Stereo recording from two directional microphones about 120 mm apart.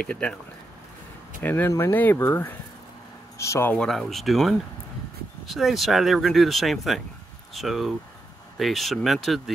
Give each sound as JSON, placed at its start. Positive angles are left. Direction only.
{"t": 0.1, "sound": "speech", "side_deg": 10}
{"t": 1.4, "sound": "speech", "side_deg": 15}
{"t": 3.7, "sound": "speech", "side_deg": 5}